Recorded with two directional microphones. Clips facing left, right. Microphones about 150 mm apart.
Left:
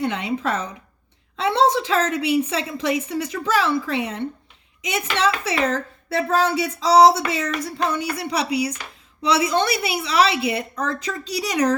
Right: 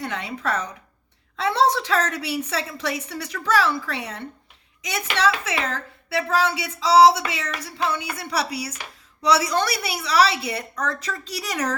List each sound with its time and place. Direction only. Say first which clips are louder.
0.0 s a woman's voice: left 5 dB; 20° left (ahead or behind)
6.1 s a sound: left 2 dB; 45° left (ahead or behind)
8.3 s a woman's voice: left 3 dB; 20° left (ahead or behind)